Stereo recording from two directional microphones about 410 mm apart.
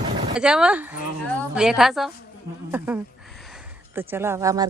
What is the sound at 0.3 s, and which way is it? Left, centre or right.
Speech, centre.